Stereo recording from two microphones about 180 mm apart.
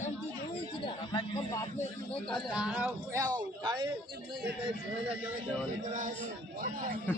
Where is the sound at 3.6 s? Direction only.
25° right (ahead or behind).